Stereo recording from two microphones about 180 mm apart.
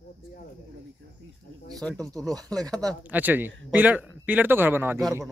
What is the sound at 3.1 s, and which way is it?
Speech, 10° right (ahead or behind).